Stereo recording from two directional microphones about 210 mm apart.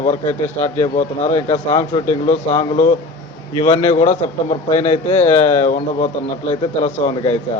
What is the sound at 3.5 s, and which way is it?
Speech, 20° left (ahead or behind).